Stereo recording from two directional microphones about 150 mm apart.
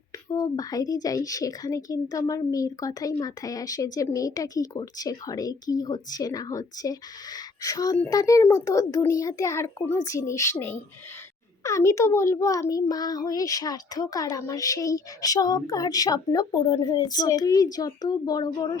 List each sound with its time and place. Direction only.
0.3 s a child's voice: 25° left (ahead or behind)